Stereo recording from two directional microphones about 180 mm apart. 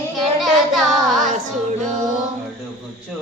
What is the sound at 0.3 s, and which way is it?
Child singing, centre (ahead or behind).